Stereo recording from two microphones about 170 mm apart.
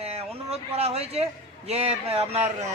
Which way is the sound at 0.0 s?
35° right (ahead or behind).